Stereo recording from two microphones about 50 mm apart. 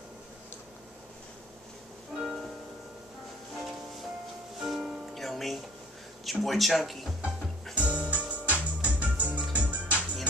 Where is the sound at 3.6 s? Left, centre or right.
Centre.